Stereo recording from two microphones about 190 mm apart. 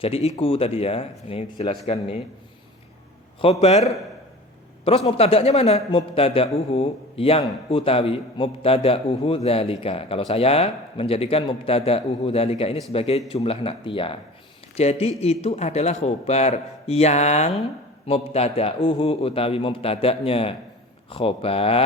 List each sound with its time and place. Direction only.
0.0 s a man's voice: 30° left (ahead or behind)
3.4 s a man's voice: 35° left (ahead or behind)